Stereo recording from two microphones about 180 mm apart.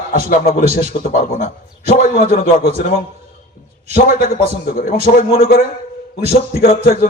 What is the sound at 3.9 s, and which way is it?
A man's voice, 55° left (ahead or behind).